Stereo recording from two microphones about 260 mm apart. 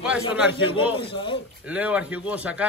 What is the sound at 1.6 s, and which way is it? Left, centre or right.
A man's voice, centre.